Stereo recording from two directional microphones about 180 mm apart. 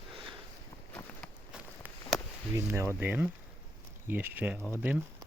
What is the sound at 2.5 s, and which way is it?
Speech, 15° right (ahead or behind).